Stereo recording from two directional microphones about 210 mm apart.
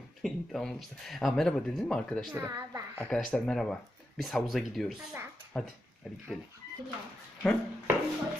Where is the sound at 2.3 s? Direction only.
15° right (ahead or behind).